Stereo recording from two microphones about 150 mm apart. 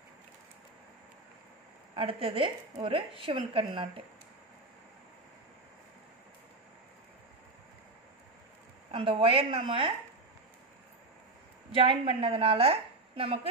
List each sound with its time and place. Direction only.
2.0 s a woman's voice: 35° right (ahead or behind)
8.9 s a woman's voice: 35° right (ahead or behind)
11.7 s a woman's voice: 35° right (ahead or behind)